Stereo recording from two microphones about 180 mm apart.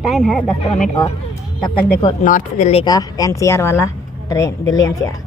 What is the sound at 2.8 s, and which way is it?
Speech, 20° left (ahead or behind).